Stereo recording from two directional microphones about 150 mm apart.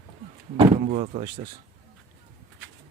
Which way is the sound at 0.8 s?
50° right (ahead or behind).